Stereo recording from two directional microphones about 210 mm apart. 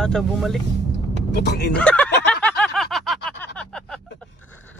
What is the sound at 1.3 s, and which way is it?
Speech, 50° left (ahead or behind).